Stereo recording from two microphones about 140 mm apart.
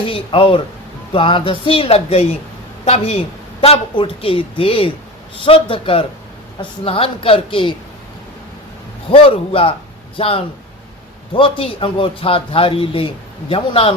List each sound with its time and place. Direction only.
0.0 s speech: 40° left (ahead or behind)
9.0 s speech: 40° left (ahead or behind)